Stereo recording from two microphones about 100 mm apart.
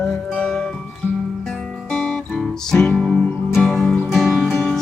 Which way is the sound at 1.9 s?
10° left (ahead or behind).